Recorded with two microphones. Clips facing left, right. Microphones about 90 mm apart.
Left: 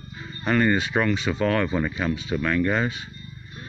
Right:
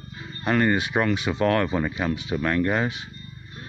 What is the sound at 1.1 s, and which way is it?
Speech, 20° right (ahead or behind).